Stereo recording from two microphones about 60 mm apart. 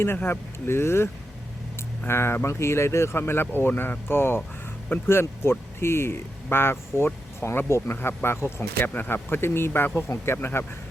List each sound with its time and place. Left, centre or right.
0.0 s speech: left
8.9 s speech: left